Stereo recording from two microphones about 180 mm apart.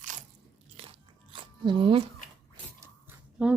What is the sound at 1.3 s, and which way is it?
Biting, 30° right (ahead or behind).